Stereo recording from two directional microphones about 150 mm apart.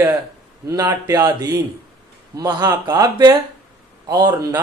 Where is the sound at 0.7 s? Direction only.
25° right (ahead or behind).